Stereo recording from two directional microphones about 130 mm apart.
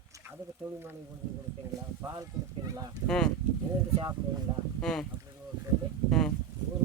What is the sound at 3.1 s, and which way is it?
Speech, 5° left (ahead or behind).